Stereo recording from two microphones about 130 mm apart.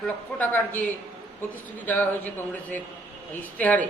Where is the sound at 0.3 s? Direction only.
15° left (ahead or behind).